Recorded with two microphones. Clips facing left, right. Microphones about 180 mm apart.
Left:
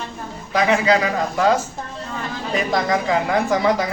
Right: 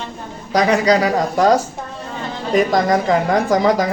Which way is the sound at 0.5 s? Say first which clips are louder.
Right 3 dB; 40° right (ahead or behind).